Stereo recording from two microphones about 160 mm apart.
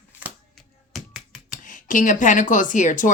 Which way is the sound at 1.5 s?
55° left (ahead or behind).